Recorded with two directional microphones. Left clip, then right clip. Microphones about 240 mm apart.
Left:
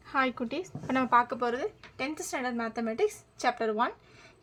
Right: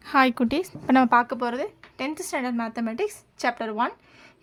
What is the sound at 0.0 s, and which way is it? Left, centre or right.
Speech, right.